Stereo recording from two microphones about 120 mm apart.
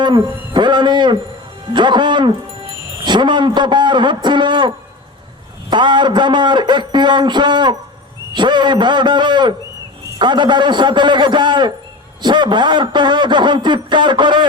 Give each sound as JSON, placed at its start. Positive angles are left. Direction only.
{"t": 0.0, "sound": "a man's voice", "side_deg": -40}
{"t": 5.7, "sound": "a man's voice", "side_deg": -40}